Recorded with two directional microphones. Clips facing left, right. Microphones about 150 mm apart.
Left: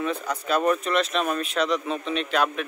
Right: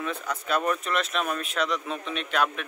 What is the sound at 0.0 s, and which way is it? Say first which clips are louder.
A man's voice: left 4 dB; centre (ahead or behind).